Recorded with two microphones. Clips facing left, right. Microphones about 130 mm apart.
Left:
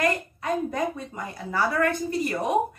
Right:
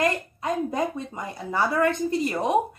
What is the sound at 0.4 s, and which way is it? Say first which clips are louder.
A woman's voice: right 3 dB; 20° right (ahead or behind).